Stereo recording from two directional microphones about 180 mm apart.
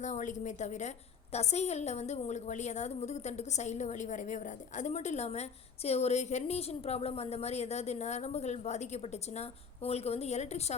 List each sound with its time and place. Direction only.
0.0 s a woman's voice: 45° left (ahead or behind)